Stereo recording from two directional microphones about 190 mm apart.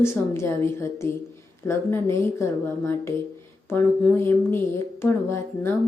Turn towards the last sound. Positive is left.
turn(degrees=10)  # may be behind; listen again after turning